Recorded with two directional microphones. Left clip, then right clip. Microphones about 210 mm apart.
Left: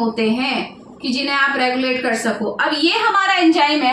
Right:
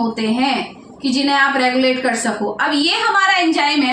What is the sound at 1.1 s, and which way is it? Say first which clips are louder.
A woman's voice: right 2 dB; 20° left (ahead or behind).